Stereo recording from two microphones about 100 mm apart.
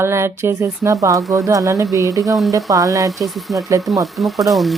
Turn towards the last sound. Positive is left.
turn(degrees=0)  # may be behind; listen again after turning